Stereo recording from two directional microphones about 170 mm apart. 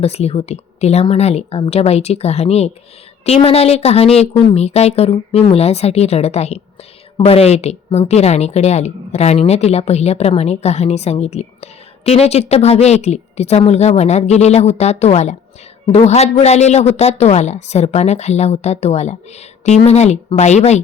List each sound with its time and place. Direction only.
0.0 s a woman's voice: 35° left (ahead or behind)